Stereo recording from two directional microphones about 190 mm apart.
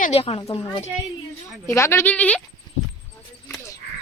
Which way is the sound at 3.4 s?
10° left (ahead or behind).